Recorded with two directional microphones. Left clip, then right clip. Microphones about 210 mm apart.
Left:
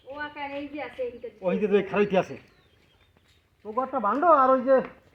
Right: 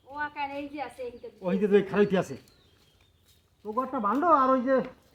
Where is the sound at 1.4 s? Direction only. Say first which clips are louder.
Even; 60° right (ahead or behind).